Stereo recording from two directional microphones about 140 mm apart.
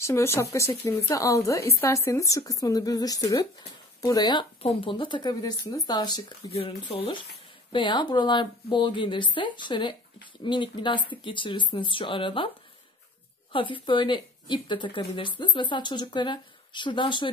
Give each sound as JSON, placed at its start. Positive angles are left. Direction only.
{"t": 0.0, "sound": "a woman's voice", "side_deg": 20}
{"t": 4.6, "sound": "a woman's voice", "side_deg": 45}
{"t": 6.5, "sound": "speech", "side_deg": 45}
{"t": 13.5, "sound": "speech", "side_deg": 35}